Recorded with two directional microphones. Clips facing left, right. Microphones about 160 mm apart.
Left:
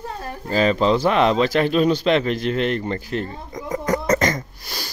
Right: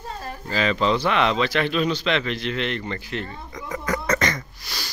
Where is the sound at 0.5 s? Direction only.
40° left (ahead or behind).